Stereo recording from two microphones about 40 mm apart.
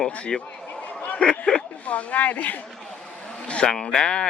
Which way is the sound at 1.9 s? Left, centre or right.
Left.